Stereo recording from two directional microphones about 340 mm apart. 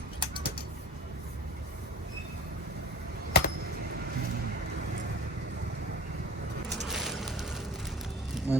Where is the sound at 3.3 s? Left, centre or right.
Left.